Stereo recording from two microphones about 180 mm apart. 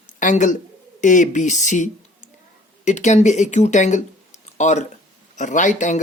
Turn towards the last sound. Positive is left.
turn(degrees=45)  # may be behind; listen again after turning